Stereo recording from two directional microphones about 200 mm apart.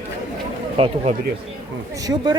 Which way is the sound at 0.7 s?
30° right (ahead or behind).